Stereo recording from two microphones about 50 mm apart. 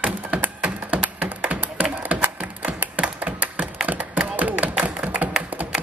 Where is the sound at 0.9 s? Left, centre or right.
Right.